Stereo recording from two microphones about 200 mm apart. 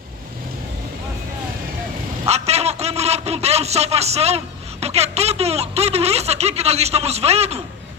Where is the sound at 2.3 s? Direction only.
30° right (ahead or behind).